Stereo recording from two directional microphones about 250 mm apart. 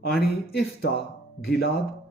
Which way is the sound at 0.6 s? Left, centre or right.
Left.